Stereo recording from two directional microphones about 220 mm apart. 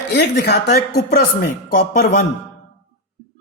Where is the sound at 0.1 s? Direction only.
50° left (ahead or behind).